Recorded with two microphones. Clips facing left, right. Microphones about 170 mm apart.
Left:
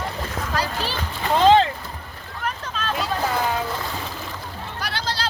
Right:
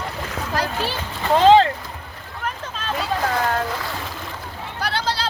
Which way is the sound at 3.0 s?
Centre (ahead or behind).